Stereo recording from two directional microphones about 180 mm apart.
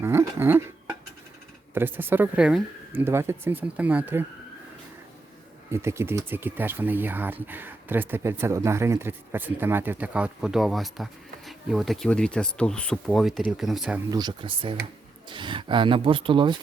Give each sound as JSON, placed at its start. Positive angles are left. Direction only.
{"t": 0.0, "sound": "a sound", "side_deg": -15}
{"t": 1.7, "sound": "speech", "side_deg": -10}
{"t": 5.7, "sound": "speech", "side_deg": -15}
{"t": 14.1, "sound": "speech", "side_deg": -25}